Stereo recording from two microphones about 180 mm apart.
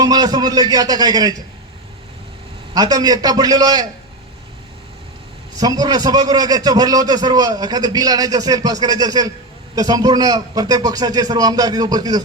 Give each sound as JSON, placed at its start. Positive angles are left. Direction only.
{"t": 0.0, "sound": "a man's voice", "side_deg": -20}
{"t": 2.7, "sound": "a man's voice", "side_deg": -20}
{"t": 5.5, "sound": "a man's voice", "side_deg": -20}